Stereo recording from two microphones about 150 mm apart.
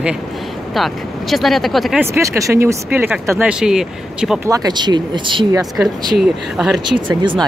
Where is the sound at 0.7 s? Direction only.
Centre (ahead or behind).